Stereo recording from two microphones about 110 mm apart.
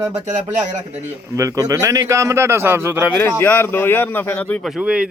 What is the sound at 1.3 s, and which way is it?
A man's voice, 30° right (ahead or behind).